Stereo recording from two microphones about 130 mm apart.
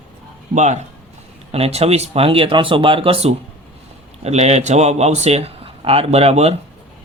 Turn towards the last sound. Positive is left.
turn(degrees=-55)  # may be behind; listen again after turning